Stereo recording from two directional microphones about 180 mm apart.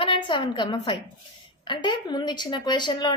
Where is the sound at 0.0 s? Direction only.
25° left (ahead or behind).